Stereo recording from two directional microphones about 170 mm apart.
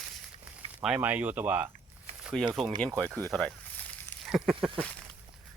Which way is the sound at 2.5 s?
Centre (ahead or behind).